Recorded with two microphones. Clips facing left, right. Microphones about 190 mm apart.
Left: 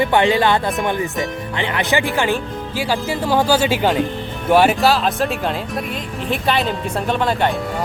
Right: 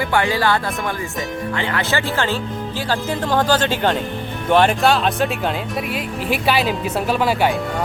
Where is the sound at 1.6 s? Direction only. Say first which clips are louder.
Left 4 dB; 20° left (ahead or behind); by 7.5 s 5° right (ahead or behind).